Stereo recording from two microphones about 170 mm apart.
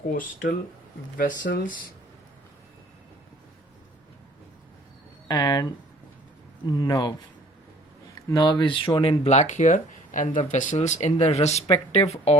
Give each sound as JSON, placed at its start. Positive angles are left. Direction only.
{"t": 0.1, "sound": "speech", "side_deg": 55}
{"t": 5.3, "sound": "speech", "side_deg": 20}
{"t": 6.7, "sound": "speech", "side_deg": 20}
{"t": 8.3, "sound": "speech", "side_deg": 25}